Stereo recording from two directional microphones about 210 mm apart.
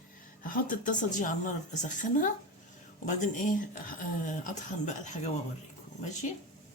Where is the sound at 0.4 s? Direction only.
40° left (ahead or behind).